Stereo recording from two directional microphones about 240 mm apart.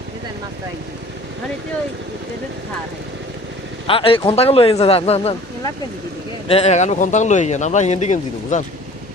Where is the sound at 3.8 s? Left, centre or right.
Left.